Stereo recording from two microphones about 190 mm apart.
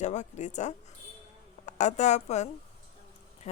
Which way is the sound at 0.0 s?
40° left (ahead or behind).